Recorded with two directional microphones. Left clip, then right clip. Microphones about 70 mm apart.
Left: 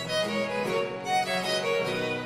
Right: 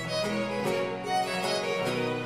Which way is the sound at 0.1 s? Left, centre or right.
Left.